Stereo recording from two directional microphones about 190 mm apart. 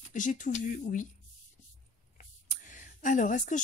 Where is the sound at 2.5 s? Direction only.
40° left (ahead or behind).